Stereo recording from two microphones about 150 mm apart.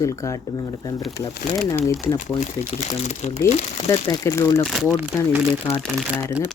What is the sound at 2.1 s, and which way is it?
Speech, 50° left (ahead or behind).